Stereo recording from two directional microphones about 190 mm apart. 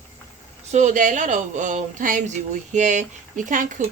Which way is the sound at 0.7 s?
40° right (ahead or behind).